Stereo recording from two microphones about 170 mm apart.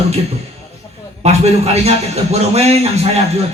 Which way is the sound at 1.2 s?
40° right (ahead or behind).